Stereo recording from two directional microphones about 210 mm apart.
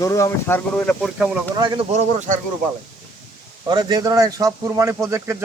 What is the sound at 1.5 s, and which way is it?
Speech, 20° right (ahead or behind).